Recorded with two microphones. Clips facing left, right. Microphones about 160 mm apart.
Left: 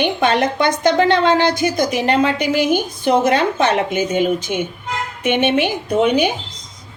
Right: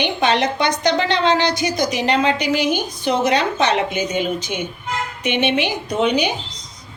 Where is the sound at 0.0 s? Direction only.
50° left (ahead or behind).